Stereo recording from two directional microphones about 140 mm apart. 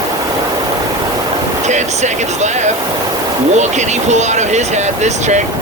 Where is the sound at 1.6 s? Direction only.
55° right (ahead or behind).